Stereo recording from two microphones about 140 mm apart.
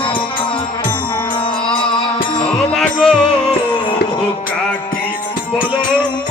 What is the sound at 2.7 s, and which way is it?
Music, 5° left (ahead or behind).